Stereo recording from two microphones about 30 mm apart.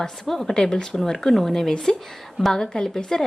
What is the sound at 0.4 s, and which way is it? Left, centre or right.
Speech, left.